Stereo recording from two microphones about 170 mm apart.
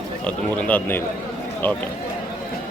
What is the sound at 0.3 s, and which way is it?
Speech, 10° left (ahead or behind).